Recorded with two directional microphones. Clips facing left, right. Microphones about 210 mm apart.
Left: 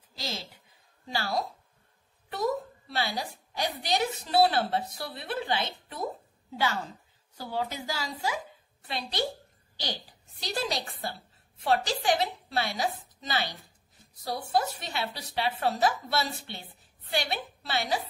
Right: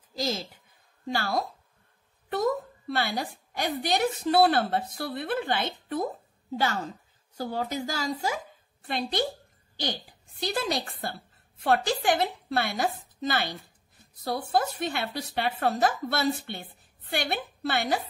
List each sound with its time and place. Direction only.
0.2 s a woman's voice: 45° right (ahead or behind)
2.9 s a woman's voice: 50° right (ahead or behind)
7.3 s a woman's voice: 45° right (ahead or behind)
10.4 s a woman's voice: 55° right (ahead or behind)